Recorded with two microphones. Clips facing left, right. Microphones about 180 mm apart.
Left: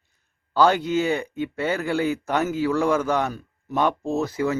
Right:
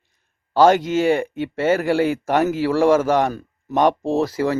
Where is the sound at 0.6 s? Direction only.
50° right (ahead or behind).